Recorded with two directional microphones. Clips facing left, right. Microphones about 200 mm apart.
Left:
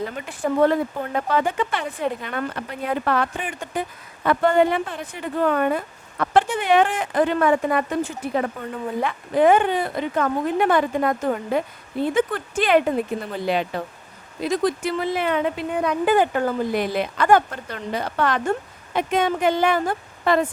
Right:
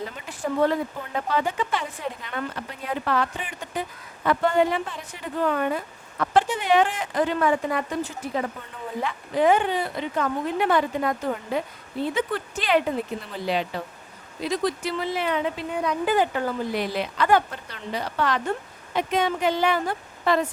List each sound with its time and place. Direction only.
0.3 s speech: 55° left (ahead or behind)